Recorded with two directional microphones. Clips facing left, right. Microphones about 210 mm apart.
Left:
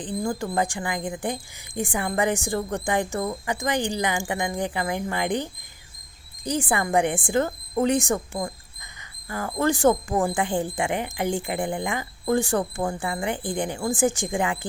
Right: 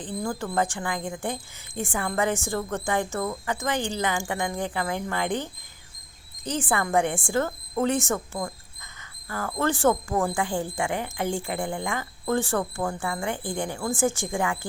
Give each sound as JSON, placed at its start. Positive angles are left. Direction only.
{"t": 0.0, "sound": "a woman's voice", "side_deg": 15}